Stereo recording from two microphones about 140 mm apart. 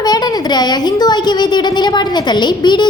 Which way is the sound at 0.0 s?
30° left (ahead or behind).